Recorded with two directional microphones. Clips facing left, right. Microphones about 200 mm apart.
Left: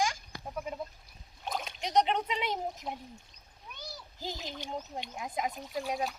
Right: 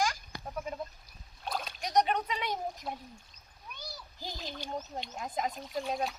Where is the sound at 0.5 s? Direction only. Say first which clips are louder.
Even; 10° left (ahead or behind).